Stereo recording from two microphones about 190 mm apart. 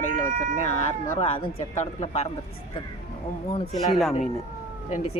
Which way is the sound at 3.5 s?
20° left (ahead or behind).